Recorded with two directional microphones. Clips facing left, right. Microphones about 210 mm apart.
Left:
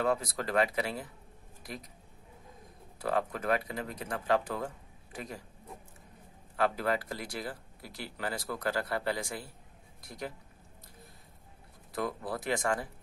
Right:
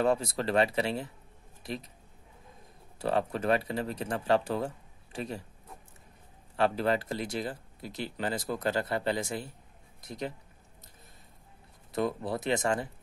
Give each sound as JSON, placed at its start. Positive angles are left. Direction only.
{"t": 0.0, "sound": "speech", "side_deg": -30}
{"t": 3.0, "sound": "speech", "side_deg": -25}
{"t": 6.5, "sound": "speech", "side_deg": -30}
{"t": 11.9, "sound": "speech", "side_deg": -25}